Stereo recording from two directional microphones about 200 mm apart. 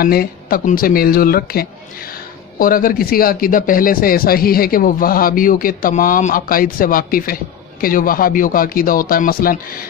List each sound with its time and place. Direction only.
0.0 s speech: 45° left (ahead or behind)